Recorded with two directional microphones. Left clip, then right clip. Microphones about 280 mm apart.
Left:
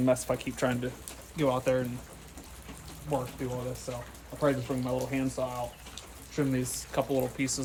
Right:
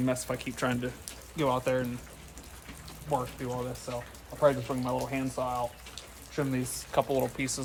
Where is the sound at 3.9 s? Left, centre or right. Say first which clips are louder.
Right 1 dB; centre.